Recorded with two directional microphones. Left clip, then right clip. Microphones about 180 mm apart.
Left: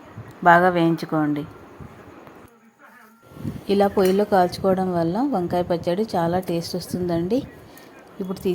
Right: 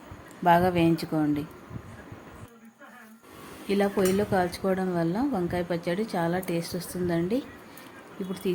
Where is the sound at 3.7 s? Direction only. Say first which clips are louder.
Left 7 dB; 25° left (ahead or behind).